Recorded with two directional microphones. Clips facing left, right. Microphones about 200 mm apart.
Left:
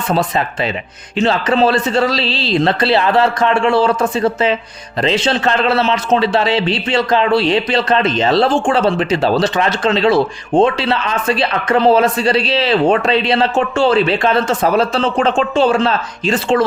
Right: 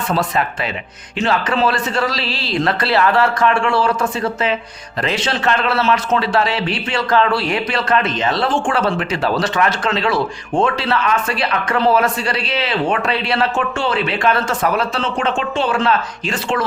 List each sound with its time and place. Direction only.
0.1 s a man's voice: 25° left (ahead or behind)